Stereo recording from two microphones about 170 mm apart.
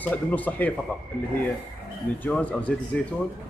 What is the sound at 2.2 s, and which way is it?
Speech, 10° left (ahead or behind).